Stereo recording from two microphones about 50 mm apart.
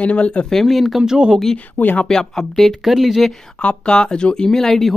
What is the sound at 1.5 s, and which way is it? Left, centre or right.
Speech, left.